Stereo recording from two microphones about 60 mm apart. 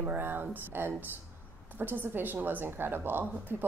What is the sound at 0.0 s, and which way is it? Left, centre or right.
A woman's voice, right.